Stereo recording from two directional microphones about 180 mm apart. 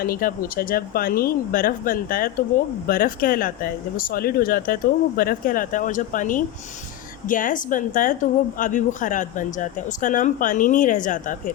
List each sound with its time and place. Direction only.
0.0 s a woman's voice: 55° left (ahead or behind)